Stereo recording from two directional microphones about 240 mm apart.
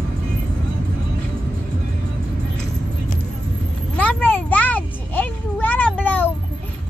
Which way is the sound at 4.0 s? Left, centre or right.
Centre.